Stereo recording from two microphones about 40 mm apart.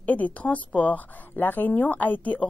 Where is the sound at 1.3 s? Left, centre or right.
Left.